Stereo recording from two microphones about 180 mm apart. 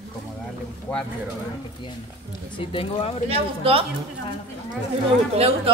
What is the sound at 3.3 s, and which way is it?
Speech, 30° right (ahead or behind).